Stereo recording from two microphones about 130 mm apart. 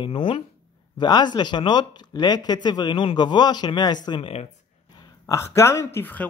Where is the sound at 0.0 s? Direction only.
40° left (ahead or behind).